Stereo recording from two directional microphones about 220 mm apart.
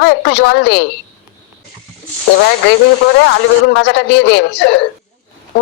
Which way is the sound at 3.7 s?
50° left (ahead or behind).